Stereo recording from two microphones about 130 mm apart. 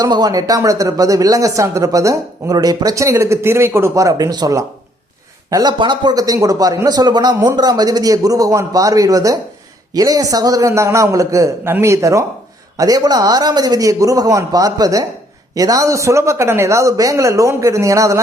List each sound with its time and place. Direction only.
0.0 s speech: 30° right (ahead or behind)